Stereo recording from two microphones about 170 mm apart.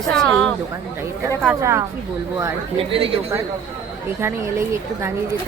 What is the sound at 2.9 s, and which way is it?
Speech, 35° right (ahead or behind).